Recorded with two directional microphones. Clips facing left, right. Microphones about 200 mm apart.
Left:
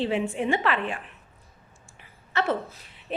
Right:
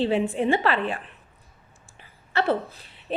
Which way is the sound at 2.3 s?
35° right (ahead or behind).